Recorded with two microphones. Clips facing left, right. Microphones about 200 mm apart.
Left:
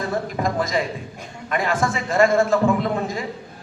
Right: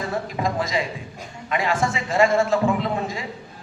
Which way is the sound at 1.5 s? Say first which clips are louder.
Left 1 dB; 50° left (ahead or behind).